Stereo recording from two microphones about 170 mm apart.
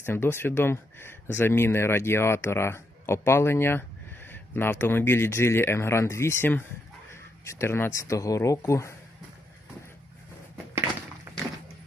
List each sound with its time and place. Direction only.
0.0 s speech: 15° left (ahead or behind)